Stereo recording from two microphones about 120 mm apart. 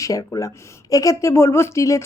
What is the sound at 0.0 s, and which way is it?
Speech, 30° left (ahead or behind).